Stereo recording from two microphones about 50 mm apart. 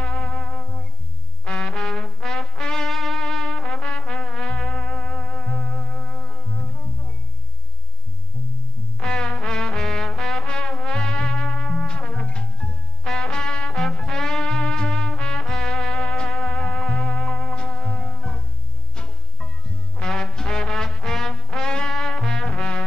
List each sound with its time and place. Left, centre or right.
0.0 s music: centre
9.0 s music: centre
20.0 s music: centre